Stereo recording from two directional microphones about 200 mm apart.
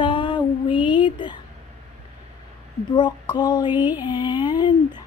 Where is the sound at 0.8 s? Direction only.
10° right (ahead or behind).